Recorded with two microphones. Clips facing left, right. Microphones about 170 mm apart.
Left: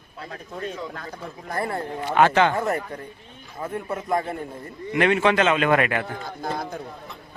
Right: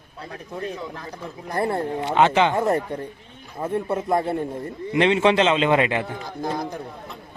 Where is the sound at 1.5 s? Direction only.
25° right (ahead or behind).